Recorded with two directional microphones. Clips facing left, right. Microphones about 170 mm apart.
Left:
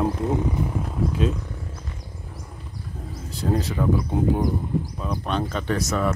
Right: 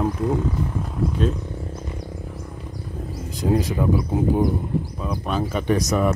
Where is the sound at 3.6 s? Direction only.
10° right (ahead or behind).